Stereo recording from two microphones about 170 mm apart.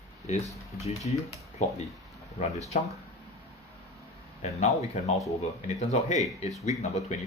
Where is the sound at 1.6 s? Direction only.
40° left (ahead or behind).